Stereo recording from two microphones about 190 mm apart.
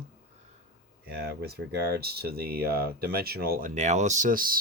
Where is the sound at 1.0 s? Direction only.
55° right (ahead or behind).